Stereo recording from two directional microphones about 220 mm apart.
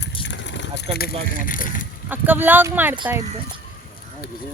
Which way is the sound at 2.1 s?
10° right (ahead or behind).